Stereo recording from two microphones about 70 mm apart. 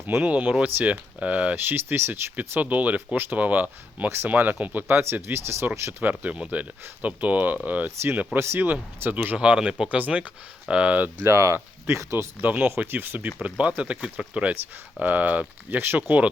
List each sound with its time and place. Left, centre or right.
0.2 s speech: centre
1.5 s speech: right
2.3 s speech: right
6.0 s speech: right
11.2 s speech: right
12.4 s speech: right